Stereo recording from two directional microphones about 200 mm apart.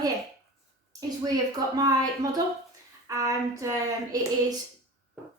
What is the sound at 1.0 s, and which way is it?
A woman's voice, 20° right (ahead or behind).